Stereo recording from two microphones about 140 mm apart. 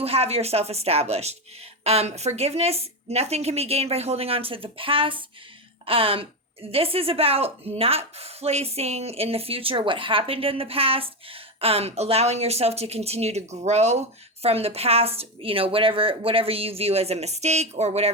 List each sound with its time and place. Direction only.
0.0 s a woman's voice: 45° right (ahead or behind)